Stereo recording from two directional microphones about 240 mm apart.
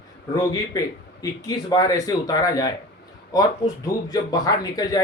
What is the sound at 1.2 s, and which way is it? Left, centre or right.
Speech, centre.